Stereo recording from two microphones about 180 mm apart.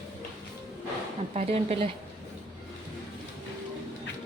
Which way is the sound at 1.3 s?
35° right (ahead or behind).